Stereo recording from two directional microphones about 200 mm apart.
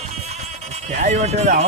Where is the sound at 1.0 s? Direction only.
35° right (ahead or behind).